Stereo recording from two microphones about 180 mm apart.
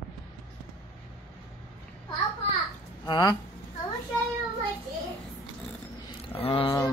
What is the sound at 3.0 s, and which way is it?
Speech, 20° left (ahead or behind).